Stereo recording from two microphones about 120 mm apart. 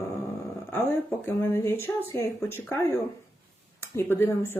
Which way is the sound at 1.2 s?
20° left (ahead or behind).